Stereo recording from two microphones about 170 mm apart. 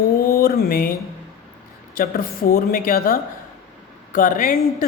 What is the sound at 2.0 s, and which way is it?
A woman's voice, 60° left (ahead or behind).